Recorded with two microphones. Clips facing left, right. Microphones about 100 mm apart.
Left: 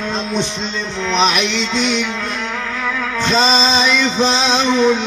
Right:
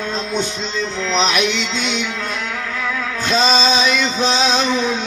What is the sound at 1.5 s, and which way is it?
Music, 30° left (ahead or behind).